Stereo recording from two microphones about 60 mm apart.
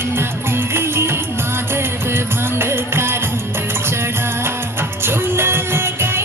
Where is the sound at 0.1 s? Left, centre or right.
Right.